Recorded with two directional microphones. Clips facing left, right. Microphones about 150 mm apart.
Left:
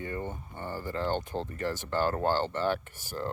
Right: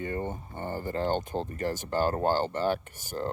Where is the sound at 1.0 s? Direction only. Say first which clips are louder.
Right 2 dB; 20° right (ahead or behind).